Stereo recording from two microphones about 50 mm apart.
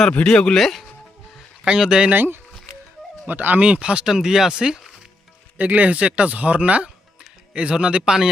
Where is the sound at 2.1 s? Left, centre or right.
Right.